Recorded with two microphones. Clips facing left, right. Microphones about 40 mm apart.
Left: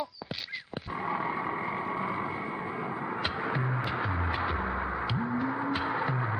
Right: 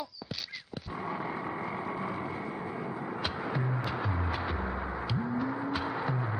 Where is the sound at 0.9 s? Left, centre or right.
Left.